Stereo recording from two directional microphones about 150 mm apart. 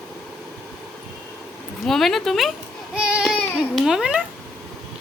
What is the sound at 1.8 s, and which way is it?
Speech, centre (ahead or behind).